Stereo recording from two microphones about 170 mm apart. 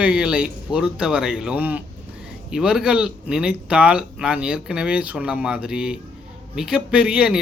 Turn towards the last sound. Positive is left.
turn(degrees=-5)  # may be behind; listen again after turning